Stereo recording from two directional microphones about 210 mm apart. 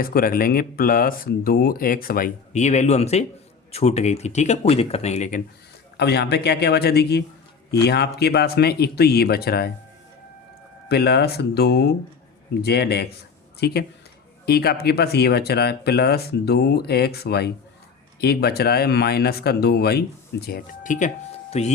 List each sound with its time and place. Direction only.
0.0 s speech: 45° left (ahead or behind)
6.0 s speech: 50° left (ahead or behind)
10.8 s speech: 50° left (ahead or behind); by 21.7 s 30° left (ahead or behind)